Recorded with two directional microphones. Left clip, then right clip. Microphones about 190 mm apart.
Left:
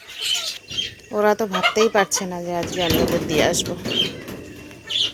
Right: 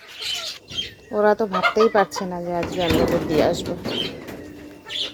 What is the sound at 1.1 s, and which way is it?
Speech, 10° right (ahead or behind).